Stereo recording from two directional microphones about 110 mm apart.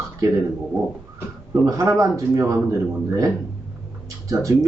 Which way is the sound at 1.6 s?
30° right (ahead or behind).